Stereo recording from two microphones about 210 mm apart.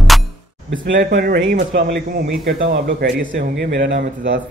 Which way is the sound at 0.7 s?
60° right (ahead or behind).